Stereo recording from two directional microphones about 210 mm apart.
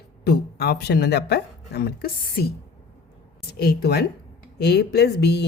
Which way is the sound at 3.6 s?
50° left (ahead or behind).